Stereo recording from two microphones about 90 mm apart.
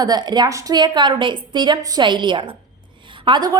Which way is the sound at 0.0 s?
50° right (ahead or behind).